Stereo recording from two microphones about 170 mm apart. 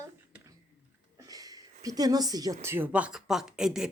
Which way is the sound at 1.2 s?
20° right (ahead or behind).